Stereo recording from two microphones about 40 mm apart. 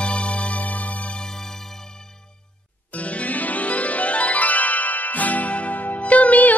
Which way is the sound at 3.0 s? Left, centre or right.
Left.